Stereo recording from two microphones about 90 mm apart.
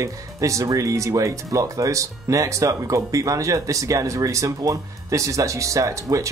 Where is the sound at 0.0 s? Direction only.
35° right (ahead or behind).